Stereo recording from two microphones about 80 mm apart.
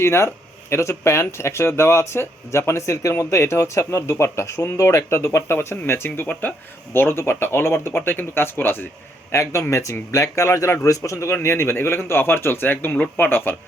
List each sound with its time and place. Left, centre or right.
0.0 s speech: left